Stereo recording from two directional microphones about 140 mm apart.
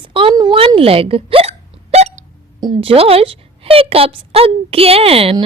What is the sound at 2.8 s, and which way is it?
A woman's voice, 40° right (ahead or behind).